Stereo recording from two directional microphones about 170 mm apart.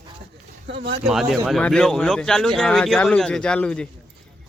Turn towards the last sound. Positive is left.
turn(degrees=5)  # may be behind; listen again after turning